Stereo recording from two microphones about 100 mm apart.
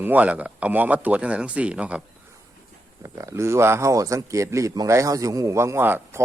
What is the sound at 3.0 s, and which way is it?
Speech, 30° right (ahead or behind).